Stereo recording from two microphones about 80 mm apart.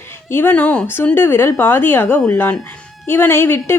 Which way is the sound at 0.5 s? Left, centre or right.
Centre.